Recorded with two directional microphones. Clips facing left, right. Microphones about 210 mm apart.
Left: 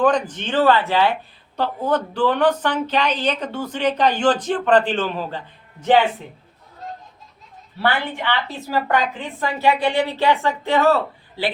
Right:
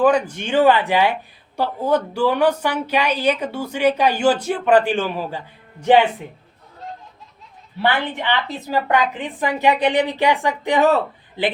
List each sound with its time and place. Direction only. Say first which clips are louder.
0.0 s speech: right 2 dB; 10° right (ahead or behind)
7.8 s speech: right 1 dB; 15° right (ahead or behind)